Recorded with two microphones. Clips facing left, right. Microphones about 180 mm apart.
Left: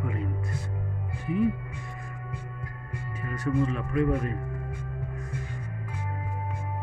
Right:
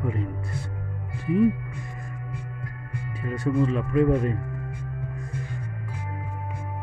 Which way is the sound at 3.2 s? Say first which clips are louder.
Right 3 dB; 30° right (ahead or behind).